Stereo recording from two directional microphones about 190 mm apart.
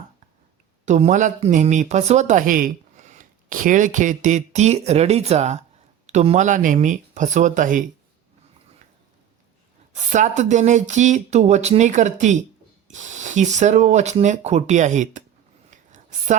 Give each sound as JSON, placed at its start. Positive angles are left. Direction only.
{"t": 0.9, "sound": "speech", "side_deg": -40}
{"t": 9.9, "sound": "speech", "side_deg": -40}
{"t": 15.7, "sound": "whispering", "side_deg": -40}